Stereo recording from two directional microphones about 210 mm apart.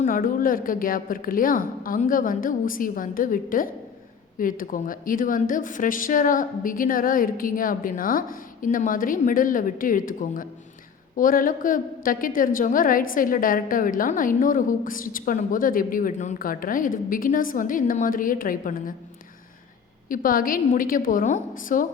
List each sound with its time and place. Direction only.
0.0 s a woman's voice: 40° left (ahead or behind)
20.1 s a woman's voice: 40° left (ahead or behind)